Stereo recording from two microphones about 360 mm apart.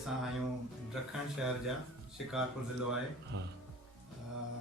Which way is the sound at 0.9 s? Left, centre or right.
Centre.